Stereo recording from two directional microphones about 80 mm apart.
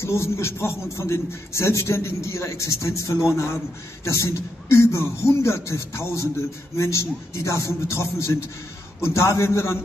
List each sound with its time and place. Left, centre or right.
0.0 s a man's voice: left